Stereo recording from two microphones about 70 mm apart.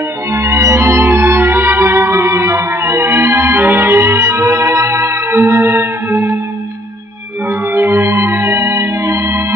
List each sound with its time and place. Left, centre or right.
0.3 s music: right
7.7 s organ: right